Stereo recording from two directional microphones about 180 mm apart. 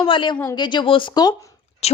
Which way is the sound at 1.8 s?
35° left (ahead or behind).